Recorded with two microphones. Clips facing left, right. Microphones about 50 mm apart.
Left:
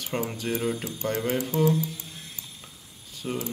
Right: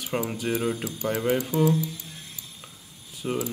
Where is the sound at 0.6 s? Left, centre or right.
Centre.